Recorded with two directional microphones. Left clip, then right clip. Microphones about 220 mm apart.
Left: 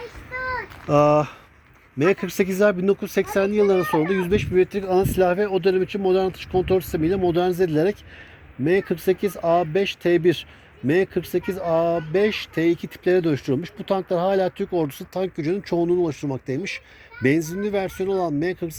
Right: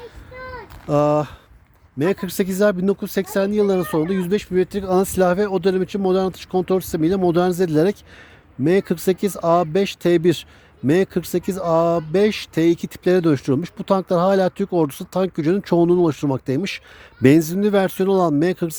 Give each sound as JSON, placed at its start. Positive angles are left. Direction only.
{"t": 0.9, "sound": "speech", "side_deg": -20}